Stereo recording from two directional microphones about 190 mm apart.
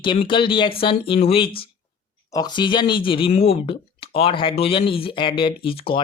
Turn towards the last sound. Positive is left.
turn(degrees=30)  # may be behind; listen again after turning